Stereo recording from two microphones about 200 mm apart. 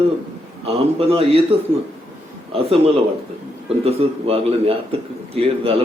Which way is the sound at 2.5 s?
30° right (ahead or behind).